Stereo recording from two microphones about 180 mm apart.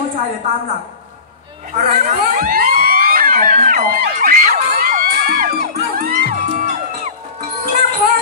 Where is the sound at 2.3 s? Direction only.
50° right (ahead or behind).